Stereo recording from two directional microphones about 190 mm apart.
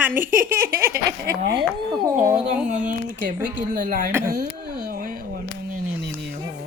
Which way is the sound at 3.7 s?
45° right (ahead or behind).